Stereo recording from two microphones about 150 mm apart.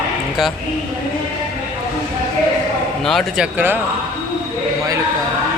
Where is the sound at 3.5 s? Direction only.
10° right (ahead or behind).